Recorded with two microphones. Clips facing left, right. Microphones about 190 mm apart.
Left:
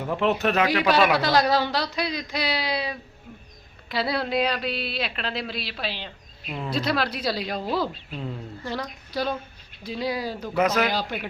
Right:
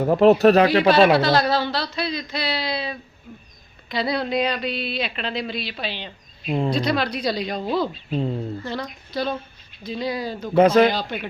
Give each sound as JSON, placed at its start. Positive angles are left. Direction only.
{"t": 0.0, "sound": "speech", "side_deg": -40}
{"t": 1.1, "sound": "speech", "side_deg": 10}
{"t": 8.1, "sound": "speech", "side_deg": -30}
{"t": 8.6, "sound": "speech", "side_deg": 10}
{"t": 10.5, "sound": "speech", "side_deg": -30}
{"t": 10.9, "sound": "speech", "side_deg": 5}